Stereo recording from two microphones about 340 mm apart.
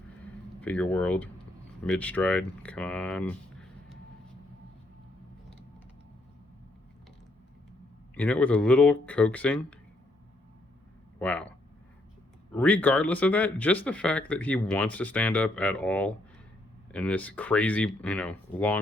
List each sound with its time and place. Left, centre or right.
0.6 s speech: centre
8.1 s speech: centre
11.2 s speech: centre
12.5 s speech: centre